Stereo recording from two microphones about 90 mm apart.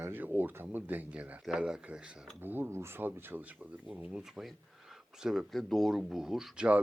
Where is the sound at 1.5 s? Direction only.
5° right (ahead or behind).